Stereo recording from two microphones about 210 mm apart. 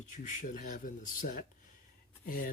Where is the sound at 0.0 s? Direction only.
35° left (ahead or behind).